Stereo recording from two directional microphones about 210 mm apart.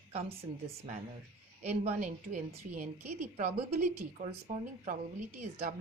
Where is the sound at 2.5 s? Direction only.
40° right (ahead or behind).